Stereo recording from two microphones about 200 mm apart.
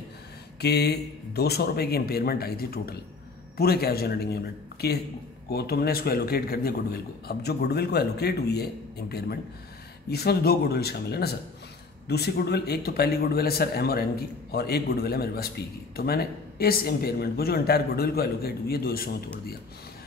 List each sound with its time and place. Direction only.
0.6 s speech: 55° left (ahead or behind)
10.0 s speech: 55° left (ahead or behind)